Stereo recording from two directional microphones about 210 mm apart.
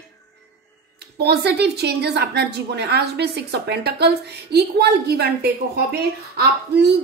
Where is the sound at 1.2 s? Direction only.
50° right (ahead or behind).